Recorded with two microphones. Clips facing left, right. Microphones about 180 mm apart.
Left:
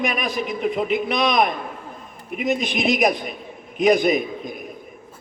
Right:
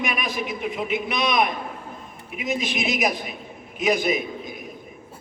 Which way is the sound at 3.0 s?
45° left (ahead or behind).